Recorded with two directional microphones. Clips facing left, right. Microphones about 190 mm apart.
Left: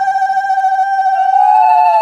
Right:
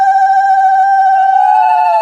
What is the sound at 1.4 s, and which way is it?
Police car, centre (ahead or behind).